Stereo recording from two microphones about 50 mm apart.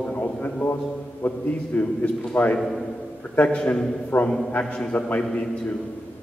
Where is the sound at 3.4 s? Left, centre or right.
Centre.